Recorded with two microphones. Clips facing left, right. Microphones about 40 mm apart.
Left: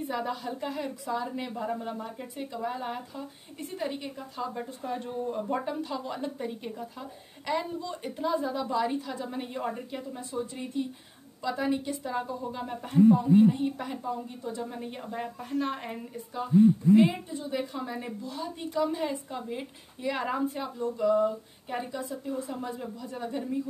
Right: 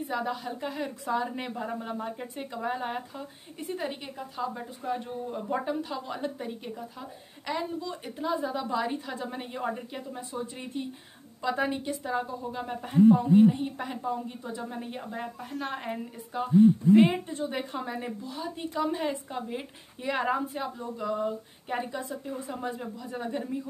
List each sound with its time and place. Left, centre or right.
0.1 s speech: centre
1.1 s a woman's voice: right
1.5 s a woman's voice: centre
2.0 s a woman's voice: right
6.4 s speech: centre
9.0 s a woman's voice: right
9.4 s a woman's voice: centre
10.3 s a woman's voice: right
11.9 s a woman's voice: centre
16.3 s a woman's voice: right
17.8 s a woman's voice: centre